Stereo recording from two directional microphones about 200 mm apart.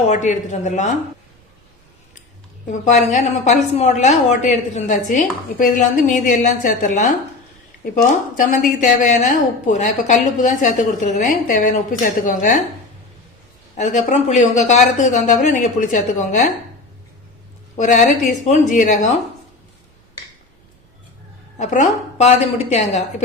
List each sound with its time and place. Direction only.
0.1 s a woman's voice: 35° left (ahead or behind)
2.8 s a woman's voice: 35° left (ahead or behind)
8.4 s a woman's voice: 40° left (ahead or behind)
13.7 s a woman's voice: 35° left (ahead or behind)
17.7 s a woman's voice: 35° left (ahead or behind)
21.6 s a woman's voice: 35° left (ahead or behind)